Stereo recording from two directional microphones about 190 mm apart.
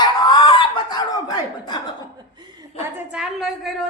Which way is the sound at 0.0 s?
25° left (ahead or behind).